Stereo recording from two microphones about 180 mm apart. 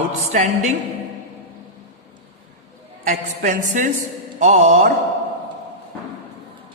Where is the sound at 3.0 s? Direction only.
45° right (ahead or behind).